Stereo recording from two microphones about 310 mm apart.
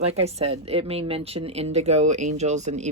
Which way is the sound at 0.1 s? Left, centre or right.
Centre.